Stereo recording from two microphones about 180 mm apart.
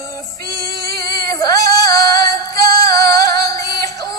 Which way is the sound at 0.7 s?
60° right (ahead or behind).